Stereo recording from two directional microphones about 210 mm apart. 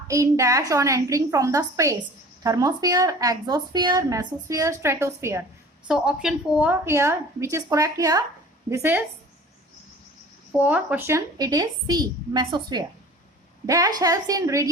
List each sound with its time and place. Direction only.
0.1 s speech: 15° right (ahead or behind)
10.6 s a woman's voice: 5° right (ahead or behind)